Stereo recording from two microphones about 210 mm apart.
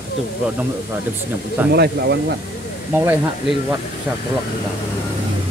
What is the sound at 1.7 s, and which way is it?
Speech, 50° right (ahead or behind).